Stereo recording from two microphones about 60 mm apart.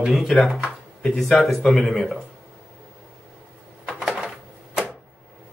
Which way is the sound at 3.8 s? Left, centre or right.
Centre.